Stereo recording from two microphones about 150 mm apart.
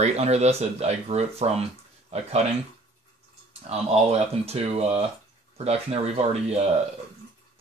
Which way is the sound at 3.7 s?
45° right (ahead or behind).